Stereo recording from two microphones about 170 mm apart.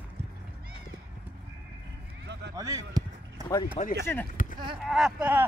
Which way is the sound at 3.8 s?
40° left (ahead or behind).